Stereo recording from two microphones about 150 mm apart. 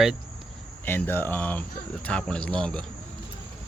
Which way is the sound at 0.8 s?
15° left (ahead or behind).